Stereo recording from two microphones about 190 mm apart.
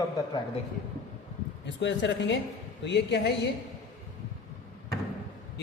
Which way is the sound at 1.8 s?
70° left (ahead or behind).